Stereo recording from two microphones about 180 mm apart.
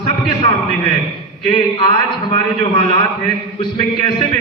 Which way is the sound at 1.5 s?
25° left (ahead or behind).